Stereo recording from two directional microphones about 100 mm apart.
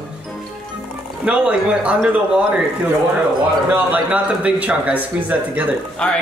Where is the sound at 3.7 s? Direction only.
15° right (ahead or behind).